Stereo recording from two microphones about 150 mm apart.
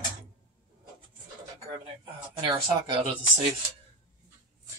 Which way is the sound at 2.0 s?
30° right (ahead or behind).